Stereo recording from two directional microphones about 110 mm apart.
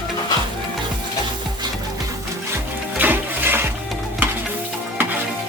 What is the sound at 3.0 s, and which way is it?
Music, 20° right (ahead or behind).